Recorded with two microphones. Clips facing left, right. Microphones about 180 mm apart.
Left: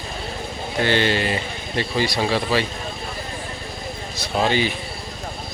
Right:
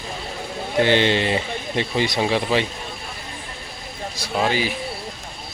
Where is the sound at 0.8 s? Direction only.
20° right (ahead or behind).